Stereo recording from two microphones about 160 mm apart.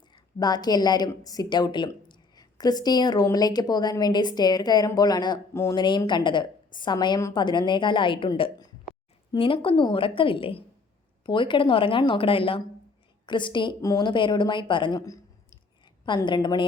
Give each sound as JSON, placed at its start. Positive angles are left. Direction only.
{"t": 0.1, "sound": "a woman's voice", "side_deg": 25}
{"t": 5.8, "sound": "a woman's voice", "side_deg": 30}